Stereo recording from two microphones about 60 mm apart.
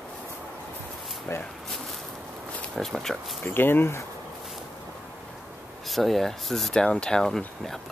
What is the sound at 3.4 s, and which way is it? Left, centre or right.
Speech, left.